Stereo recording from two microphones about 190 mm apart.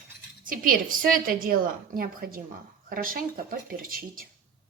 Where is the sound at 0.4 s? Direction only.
45° right (ahead or behind).